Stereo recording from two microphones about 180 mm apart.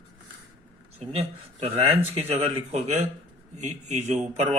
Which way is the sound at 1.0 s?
35° right (ahead or behind).